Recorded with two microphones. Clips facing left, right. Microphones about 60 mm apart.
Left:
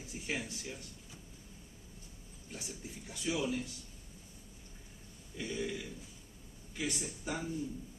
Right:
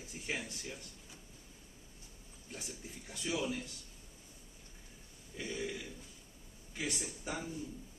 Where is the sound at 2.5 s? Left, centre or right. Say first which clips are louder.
Left 1 dB; centre.